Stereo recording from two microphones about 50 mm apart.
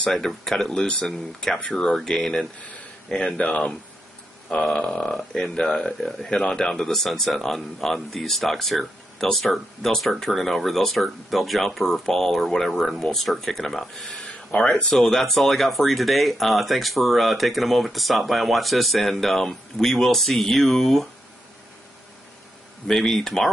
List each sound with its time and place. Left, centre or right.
0.0 s speech: centre
4.7 s speech: left
6.4 s speech: centre
6.7 s speech: centre
14.2 s speech: centre
22.8 s speech: centre